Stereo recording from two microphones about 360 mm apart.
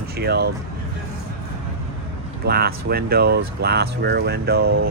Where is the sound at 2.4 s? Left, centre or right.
Right.